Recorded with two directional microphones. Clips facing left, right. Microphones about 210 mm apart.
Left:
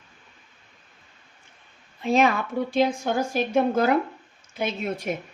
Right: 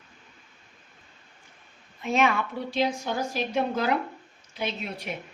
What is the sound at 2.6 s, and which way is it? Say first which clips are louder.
A woman's voice: left 4 dB; 50° left (ahead or behind).